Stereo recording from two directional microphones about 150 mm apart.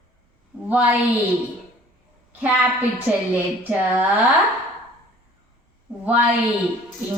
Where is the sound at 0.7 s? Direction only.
10° right (ahead or behind).